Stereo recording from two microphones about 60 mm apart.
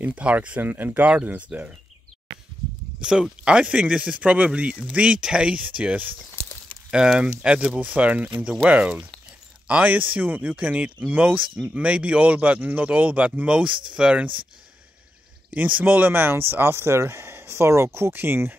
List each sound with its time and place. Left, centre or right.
0.0 s speech: right
3.0 s speech: centre
6.9 s speech: centre; by 11.6 s right
11.7 s speech: centre
15.5 s speech: right
18.1 s speech: right